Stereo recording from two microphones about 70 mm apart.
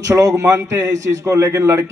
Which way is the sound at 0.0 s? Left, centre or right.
Right.